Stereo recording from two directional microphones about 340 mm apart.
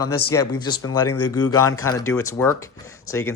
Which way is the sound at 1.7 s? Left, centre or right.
Left.